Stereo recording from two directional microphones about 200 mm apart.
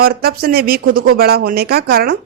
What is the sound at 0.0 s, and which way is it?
Speech, 50° right (ahead or behind).